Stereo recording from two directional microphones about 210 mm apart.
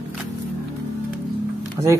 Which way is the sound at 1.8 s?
25° right (ahead or behind).